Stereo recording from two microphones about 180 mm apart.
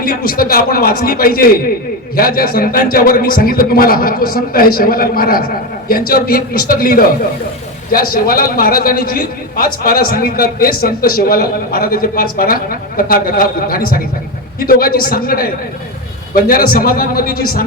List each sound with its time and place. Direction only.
0.0 s a man's voice: 55° left (ahead or behind)